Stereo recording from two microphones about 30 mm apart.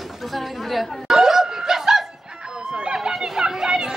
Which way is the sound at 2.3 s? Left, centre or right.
Right.